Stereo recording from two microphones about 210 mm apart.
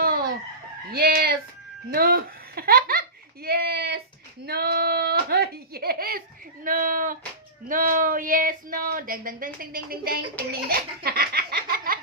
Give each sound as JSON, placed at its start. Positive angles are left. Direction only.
{"t": 0.0, "sound": "chicken", "side_deg": -45}
{"t": 0.9, "sound": "speech", "side_deg": -45}
{"t": 10.5, "sound": "laughter", "side_deg": -45}